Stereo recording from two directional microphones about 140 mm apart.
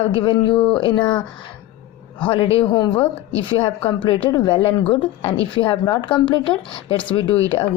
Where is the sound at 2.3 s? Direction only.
40° left (ahead or behind).